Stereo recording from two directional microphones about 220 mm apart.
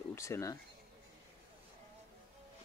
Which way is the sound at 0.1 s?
15° left (ahead or behind).